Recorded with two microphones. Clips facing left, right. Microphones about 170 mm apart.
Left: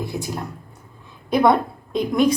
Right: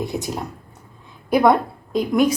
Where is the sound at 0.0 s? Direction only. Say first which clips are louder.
Right 2 dB; 20° right (ahead or behind).